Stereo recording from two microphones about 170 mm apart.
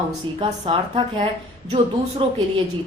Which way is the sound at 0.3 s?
30° right (ahead or behind).